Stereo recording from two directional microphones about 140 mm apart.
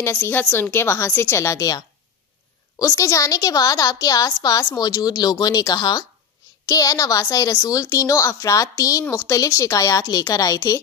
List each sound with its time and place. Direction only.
0.0 s a woman's voice: 20° left (ahead or behind)